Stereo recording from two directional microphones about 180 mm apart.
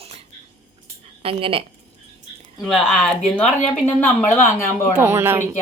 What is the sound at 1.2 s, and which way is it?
Speech, 30° right (ahead or behind).